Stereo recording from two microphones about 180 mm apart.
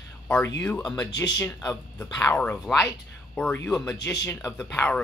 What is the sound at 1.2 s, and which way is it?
Speech, 20° left (ahead or behind).